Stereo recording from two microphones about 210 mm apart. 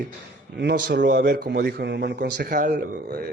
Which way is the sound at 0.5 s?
50° right (ahead or behind).